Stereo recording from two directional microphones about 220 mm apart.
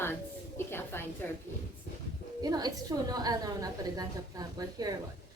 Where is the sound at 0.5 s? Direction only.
10° left (ahead or behind).